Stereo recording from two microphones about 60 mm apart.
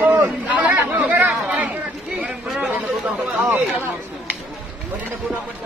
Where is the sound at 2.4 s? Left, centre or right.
Centre.